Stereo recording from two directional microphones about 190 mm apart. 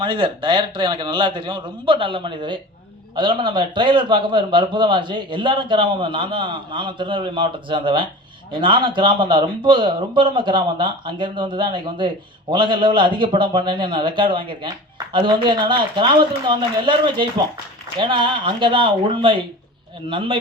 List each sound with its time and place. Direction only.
0.0 s speech: 25° right (ahead or behind)